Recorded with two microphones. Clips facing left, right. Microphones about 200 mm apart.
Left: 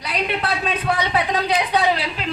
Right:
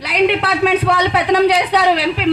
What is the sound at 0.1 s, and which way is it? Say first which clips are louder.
A woman's voice: right 8 dB; 75° right (ahead or behind).